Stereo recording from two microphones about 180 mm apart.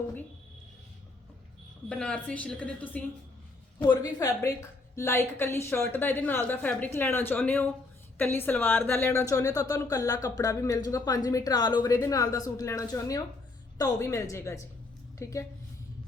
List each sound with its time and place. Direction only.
1.9 s a woman's voice: 5° left (ahead or behind)
3.8 s a woman's voice: 25° left (ahead or behind)